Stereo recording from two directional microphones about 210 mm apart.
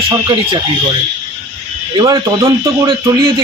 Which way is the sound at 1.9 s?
20° right (ahead or behind).